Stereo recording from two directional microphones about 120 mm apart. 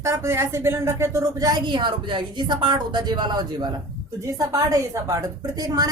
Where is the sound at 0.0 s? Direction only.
25° right (ahead or behind).